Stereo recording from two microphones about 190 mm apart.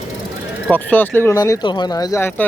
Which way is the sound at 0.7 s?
10° left (ahead or behind).